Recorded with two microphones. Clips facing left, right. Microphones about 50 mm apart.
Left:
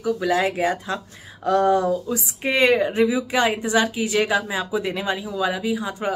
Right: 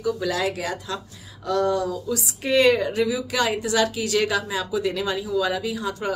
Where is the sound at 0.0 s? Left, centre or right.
Left.